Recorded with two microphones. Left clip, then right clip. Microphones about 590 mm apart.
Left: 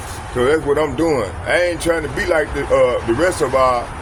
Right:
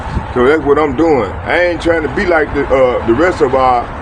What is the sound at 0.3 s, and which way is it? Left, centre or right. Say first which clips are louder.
Speech: right 5 dB; left.